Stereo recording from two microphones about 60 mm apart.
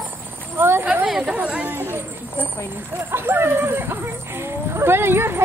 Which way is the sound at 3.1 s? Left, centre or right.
Right.